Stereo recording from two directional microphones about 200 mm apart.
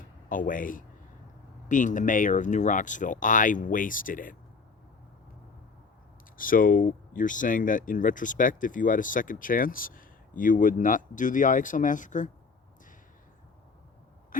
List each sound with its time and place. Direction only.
0.3 s speech: 40° left (ahead or behind)
6.3 s speech: 45° left (ahead or behind)